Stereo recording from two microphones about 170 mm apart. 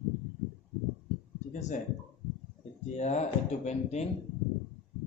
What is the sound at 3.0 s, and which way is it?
A man's voice, 40° left (ahead or behind).